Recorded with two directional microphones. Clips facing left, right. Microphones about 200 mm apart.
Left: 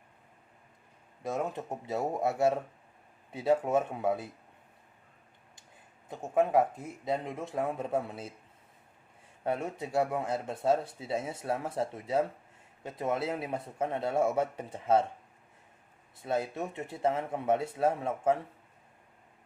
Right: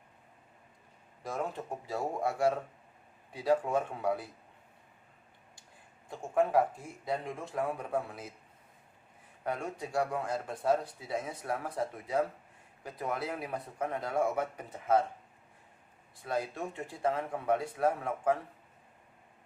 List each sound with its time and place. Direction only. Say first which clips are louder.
1.2 s speech: left 3 dB; 20° left (ahead or behind)
6.1 s speech: left 2 dB; 20° left (ahead or behind)
9.4 s speech: left 3 dB; 25° left (ahead or behind)
16.1 s speech: left 3 dB; 25° left (ahead or behind)